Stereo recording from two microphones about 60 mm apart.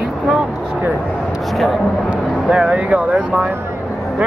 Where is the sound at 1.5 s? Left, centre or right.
Centre.